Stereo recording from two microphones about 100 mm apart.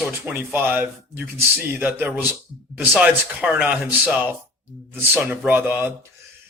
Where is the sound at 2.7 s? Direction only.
5° right (ahead or behind).